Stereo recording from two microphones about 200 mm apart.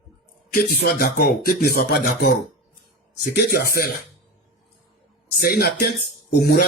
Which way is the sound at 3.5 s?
45° left (ahead or behind).